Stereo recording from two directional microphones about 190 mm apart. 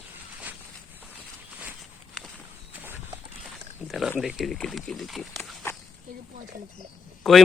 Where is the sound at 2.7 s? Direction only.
10° right (ahead or behind).